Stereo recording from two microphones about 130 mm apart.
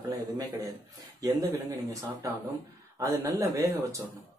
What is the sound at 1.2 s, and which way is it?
Speech, 25° right (ahead or behind).